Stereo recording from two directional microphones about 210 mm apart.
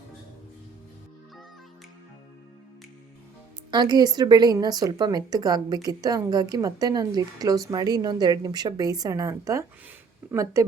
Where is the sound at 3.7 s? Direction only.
20° right (ahead or behind).